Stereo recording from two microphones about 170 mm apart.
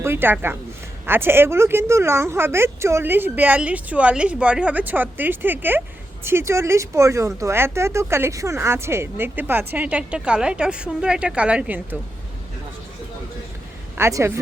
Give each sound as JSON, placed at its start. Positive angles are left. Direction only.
{"t": 0.0, "sound": "speech", "side_deg": -15}
{"t": 13.9, "sound": "speech", "side_deg": -15}